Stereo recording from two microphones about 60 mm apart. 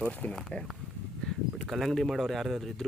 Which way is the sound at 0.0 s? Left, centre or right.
Centre.